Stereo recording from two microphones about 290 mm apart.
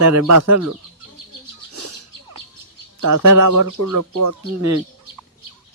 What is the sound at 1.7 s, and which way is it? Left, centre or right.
Bird, right.